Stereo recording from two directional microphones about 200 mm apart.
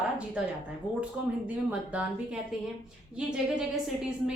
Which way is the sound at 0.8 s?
25° left (ahead or behind).